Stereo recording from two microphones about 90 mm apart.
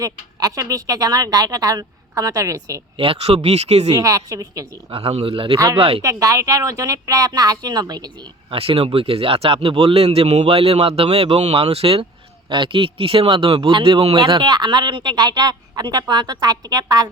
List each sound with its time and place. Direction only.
0.0 s a woman's voice: 40° right (ahead or behind)
3.3 s speech: 90° right
3.9 s speech: 40° right (ahead or behind)
4.9 s speech: 90° right
6.0 s speech: 40° right (ahead or behind)
8.4 s speech: 90° right
12.5 s a man's voice: 65° right (ahead or behind)
13.7 s speech: 60° right (ahead or behind)